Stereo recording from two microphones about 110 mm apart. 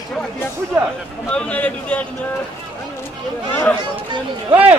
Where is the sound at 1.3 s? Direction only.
10° left (ahead or behind).